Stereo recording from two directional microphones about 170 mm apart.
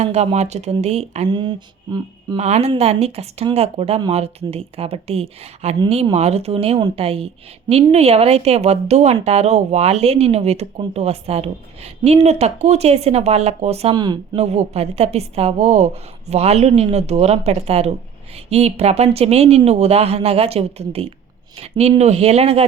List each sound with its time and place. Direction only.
0.0 s speech: 40° right (ahead or behind)
1.3 s a sound: 25° right (ahead or behind)
2.4 s speech: 40° right (ahead or behind)
13.9 s speech: 25° right (ahead or behind)
14.3 s speech: 40° right (ahead or behind)